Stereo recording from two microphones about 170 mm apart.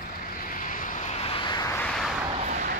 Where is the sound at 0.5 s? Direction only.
50° left (ahead or behind).